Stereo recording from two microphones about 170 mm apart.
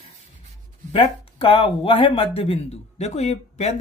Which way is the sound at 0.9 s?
30° left (ahead or behind).